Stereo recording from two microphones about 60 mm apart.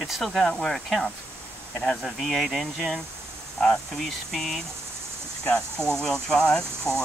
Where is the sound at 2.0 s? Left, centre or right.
Centre.